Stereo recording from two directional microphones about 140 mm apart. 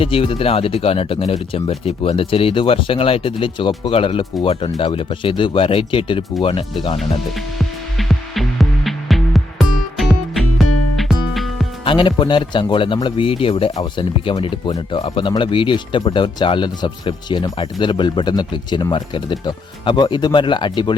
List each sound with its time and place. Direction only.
0.0 s speech: 40° left (ahead or behind)
7.0 s music: centre (ahead or behind)
11.9 s speech: 35° left (ahead or behind)